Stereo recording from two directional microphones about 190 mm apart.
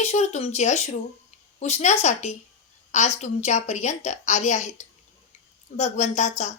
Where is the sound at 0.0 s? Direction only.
35° left (ahead or behind).